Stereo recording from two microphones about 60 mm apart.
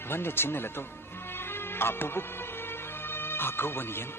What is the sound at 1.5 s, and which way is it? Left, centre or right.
Music, left.